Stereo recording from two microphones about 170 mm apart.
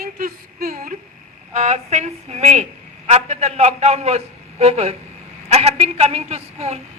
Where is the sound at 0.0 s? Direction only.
60° right (ahead or behind).